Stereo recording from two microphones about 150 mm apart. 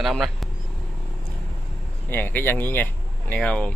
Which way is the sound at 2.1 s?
15° left (ahead or behind).